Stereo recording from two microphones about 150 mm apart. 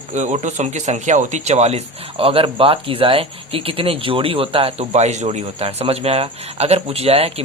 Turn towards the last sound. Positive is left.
turn(degrees=-40)  # may be behind; listen again after turning